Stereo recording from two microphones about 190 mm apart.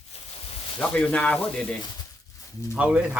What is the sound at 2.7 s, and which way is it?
Speech, 5° right (ahead or behind).